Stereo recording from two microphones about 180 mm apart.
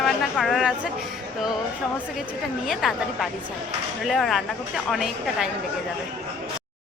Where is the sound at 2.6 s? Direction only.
Centre (ahead or behind).